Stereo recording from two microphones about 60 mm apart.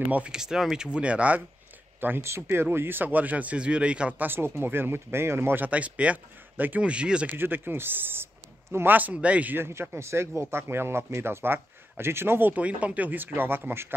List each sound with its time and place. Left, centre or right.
0.3 s speech: centre
2.0 s speech: right; by 4.1 s centre
4.2 s speech: right
5.7 s speech: right
6.9 s speech: centre
7.3 s speech: right
9.5 s speech: right
12.5 s speech: right